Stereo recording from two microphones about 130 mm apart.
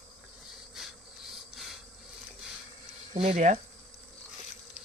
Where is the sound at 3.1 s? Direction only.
60° right (ahead or behind).